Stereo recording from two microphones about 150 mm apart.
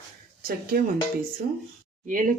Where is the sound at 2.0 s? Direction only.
65° right (ahead or behind).